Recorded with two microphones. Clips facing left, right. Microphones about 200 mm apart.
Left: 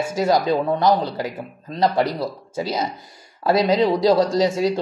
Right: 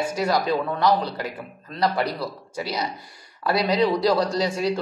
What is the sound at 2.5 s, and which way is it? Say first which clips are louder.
Speech: left 4 dB; 25° left (ahead or behind).